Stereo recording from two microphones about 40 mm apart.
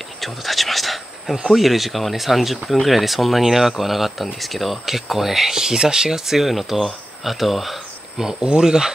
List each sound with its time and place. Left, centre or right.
0.2 s speech: centre
8.3 s speech: centre